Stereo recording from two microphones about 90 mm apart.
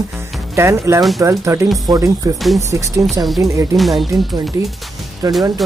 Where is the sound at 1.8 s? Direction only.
45° right (ahead or behind).